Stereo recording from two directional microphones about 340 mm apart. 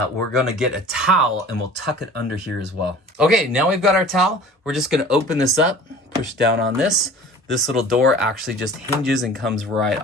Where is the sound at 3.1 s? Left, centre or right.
Centre.